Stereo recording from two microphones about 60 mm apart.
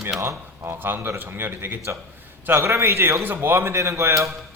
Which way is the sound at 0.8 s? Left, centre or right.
Right.